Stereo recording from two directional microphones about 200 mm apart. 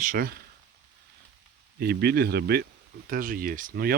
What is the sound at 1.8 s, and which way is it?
Speech, 50° right (ahead or behind).